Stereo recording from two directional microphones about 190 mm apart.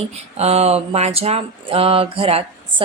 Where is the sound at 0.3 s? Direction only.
35° right (ahead or behind).